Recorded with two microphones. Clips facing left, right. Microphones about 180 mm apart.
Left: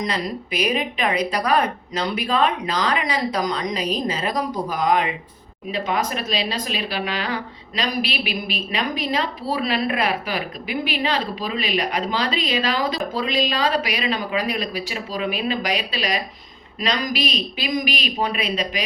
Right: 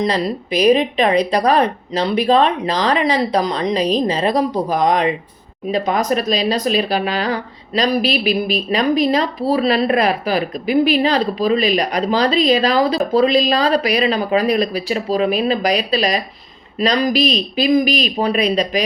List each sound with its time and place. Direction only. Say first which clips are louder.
0.0 s speech: right 7 dB; 35° right (ahead or behind)